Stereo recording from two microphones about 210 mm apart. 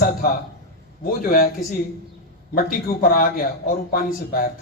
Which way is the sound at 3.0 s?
40° left (ahead or behind).